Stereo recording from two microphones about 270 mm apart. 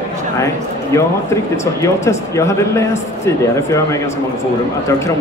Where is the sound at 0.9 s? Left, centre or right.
Centre.